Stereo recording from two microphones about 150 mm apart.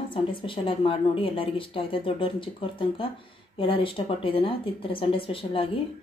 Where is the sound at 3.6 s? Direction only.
35° left (ahead or behind).